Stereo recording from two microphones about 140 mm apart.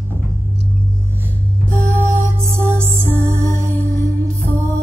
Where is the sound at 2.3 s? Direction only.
15° right (ahead or behind).